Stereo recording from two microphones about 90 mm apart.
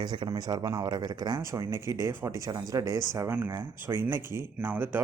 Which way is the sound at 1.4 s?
35° right (ahead or behind).